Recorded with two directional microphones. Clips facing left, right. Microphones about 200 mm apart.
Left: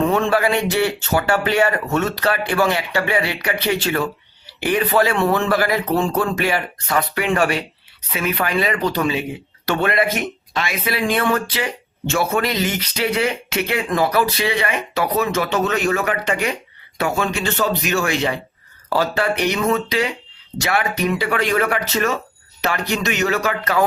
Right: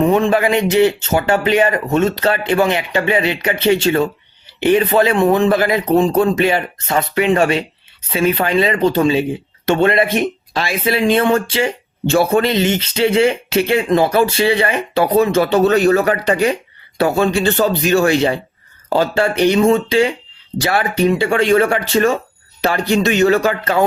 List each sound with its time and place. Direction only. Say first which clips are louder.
0.0 s speech: right 4 dB; 15° right (ahead or behind)